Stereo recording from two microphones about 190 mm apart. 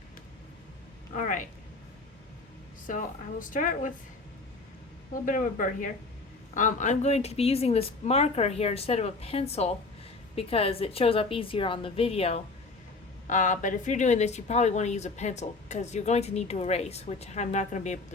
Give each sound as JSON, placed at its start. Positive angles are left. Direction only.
{"t": 1.1, "sound": "speech", "side_deg": 45}
{"t": 2.8, "sound": "speech", "side_deg": 45}
{"t": 5.2, "sound": "speech", "side_deg": 45}